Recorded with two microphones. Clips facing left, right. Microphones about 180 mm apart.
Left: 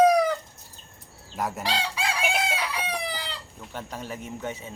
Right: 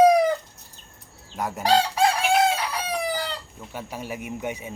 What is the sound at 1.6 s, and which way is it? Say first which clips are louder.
Chicken: right 14 dB; 45° right (ahead or behind).